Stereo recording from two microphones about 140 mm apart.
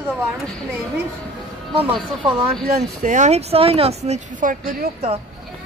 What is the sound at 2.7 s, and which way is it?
Speech, 65° right (ahead or behind).